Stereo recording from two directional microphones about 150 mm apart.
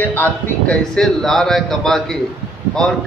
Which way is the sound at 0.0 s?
10° left (ahead or behind).